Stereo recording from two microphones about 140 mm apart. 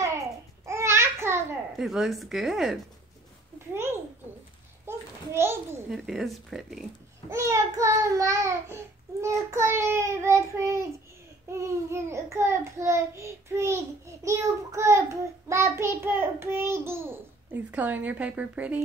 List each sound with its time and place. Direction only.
0.7 s babbling: 20° right (ahead or behind)
1.8 s speech: centre (ahead or behind)
3.7 s a sound: 15° right (ahead or behind)
5.9 s speech: 5° right (ahead or behind)
7.2 s child singing: 20° right (ahead or behind)